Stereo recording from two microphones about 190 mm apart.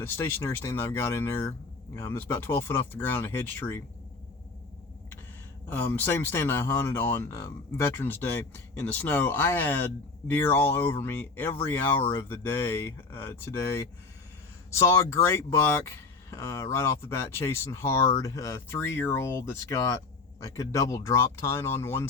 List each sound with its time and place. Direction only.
0.0 s speech: 10° left (ahead or behind)
5.6 s speech: 10° left (ahead or behind)